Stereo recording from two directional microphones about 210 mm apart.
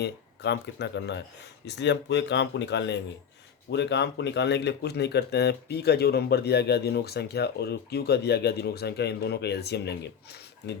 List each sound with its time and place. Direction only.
0.0 s speech: 55° left (ahead or behind)